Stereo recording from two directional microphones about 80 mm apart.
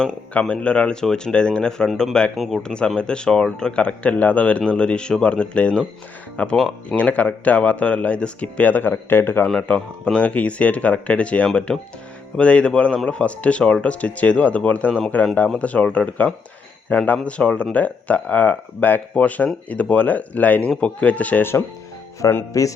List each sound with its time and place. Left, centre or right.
0.3 s speech: centre
2.3 s speech: centre
2.6 s speech: centre; by 9.5 s left
9.5 s speech: centre
22.2 s music: left